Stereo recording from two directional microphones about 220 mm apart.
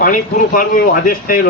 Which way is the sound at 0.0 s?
40° left (ahead or behind).